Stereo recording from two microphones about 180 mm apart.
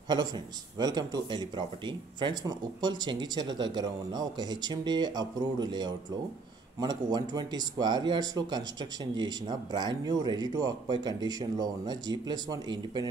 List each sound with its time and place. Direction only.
0.7 s speech: 20° right (ahead or behind)